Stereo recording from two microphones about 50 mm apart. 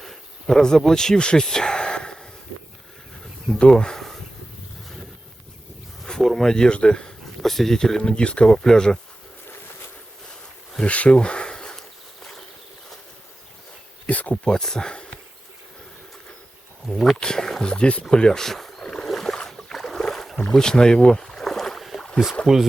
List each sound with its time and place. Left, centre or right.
0.0 s a sound: centre
3.6 s speech: centre
6.2 s speech: centre
7.4 s speech: centre; by 8.4 s left
8.4 s speech: centre
10.8 s a sound: left
11.8 s walk: centre
14.1 s speech: left
14.4 s speech: centre
17.2 s speech: centre
18.0 s boat: centre
22.5 s speech: centre